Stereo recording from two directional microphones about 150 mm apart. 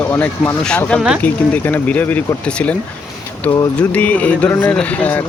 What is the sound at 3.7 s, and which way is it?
Speech, 10° left (ahead or behind).